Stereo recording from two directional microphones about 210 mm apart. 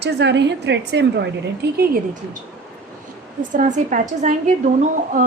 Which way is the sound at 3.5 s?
35° right (ahead or behind).